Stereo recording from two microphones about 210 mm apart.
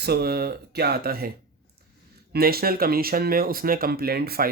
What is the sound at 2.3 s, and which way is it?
Speech, 45° right (ahead or behind).